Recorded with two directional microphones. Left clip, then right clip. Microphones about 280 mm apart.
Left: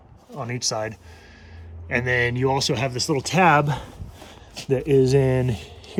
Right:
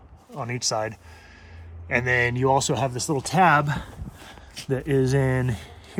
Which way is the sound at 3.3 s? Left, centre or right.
Right.